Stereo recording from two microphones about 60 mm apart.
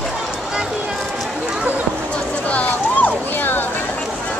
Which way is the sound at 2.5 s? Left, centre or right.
Left.